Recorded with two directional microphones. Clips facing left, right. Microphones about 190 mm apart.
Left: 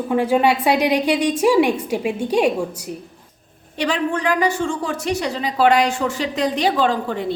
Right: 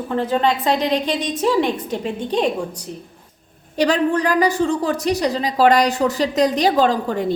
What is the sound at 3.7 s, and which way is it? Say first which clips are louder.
A woman's voice: right 4 dB; 40° right (ahead or behind).